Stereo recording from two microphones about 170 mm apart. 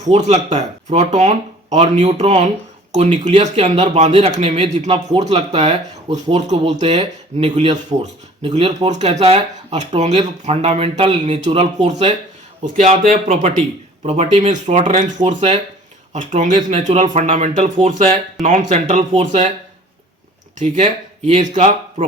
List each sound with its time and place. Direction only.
0.0 s speech: 40° right (ahead or behind)
20.6 s speech: 35° right (ahead or behind)